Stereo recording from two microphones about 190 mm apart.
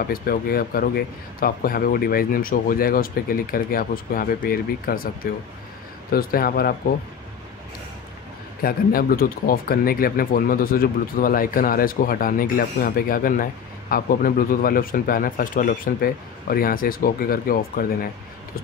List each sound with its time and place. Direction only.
0.0 s speech: 50° left (ahead or behind)
8.6 s speech: 50° left (ahead or behind)